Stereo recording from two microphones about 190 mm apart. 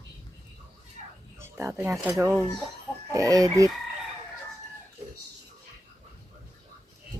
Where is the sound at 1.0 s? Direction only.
35° right (ahead or behind).